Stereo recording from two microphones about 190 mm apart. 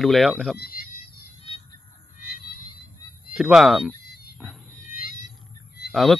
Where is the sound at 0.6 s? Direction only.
55° left (ahead or behind).